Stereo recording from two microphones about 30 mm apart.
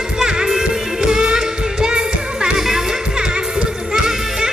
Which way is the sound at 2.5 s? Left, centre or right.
Centre.